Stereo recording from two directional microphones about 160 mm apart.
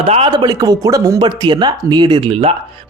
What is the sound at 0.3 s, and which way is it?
Speech, 25° right (ahead or behind).